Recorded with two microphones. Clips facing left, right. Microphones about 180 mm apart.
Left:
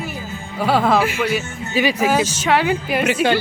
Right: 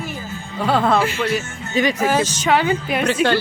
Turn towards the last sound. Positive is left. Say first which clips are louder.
# even
turn(degrees=10)  # may be behind; listen again after turning